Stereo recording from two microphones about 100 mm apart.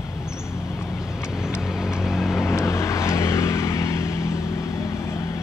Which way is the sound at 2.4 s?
30° left (ahead or behind).